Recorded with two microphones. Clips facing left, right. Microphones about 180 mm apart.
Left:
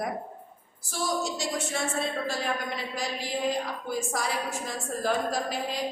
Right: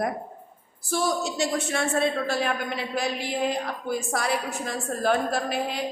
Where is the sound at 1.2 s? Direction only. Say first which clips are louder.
Right 5 dB; 65° right (ahead or behind).